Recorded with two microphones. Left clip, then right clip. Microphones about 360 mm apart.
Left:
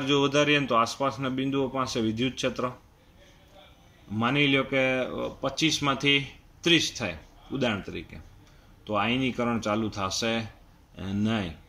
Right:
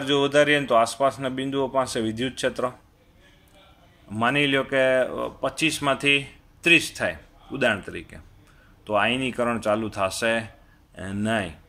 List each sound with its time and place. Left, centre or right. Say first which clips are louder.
0.0 s a man's voice: right 4 dB; centre
4.2 s speech: right 3 dB; centre